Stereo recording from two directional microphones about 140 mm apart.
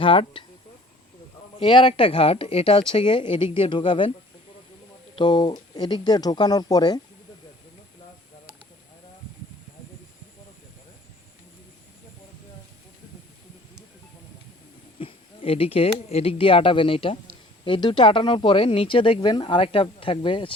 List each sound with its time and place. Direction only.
0.0 s speech: 40° left (ahead or behind)
1.5 s speech: 35° left (ahead or behind)
5.1 s speech: 35° left (ahead or behind)
14.9 s speech: 40° left (ahead or behind)